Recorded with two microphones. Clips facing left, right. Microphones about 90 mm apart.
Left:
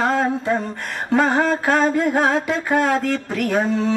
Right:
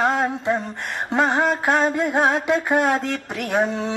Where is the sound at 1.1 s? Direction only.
20° right (ahead or behind).